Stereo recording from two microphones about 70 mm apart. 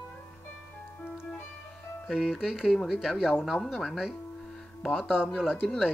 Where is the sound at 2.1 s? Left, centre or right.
Centre.